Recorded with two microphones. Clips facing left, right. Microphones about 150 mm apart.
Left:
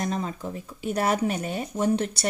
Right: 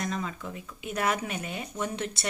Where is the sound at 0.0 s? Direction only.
35° left (ahead or behind).